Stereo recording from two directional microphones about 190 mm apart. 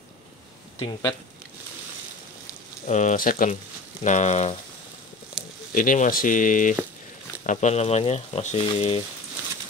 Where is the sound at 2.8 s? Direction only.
40° left (ahead or behind).